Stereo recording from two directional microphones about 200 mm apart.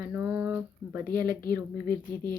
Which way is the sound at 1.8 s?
10° left (ahead or behind).